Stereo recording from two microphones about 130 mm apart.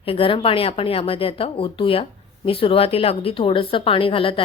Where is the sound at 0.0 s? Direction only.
45° left (ahead or behind).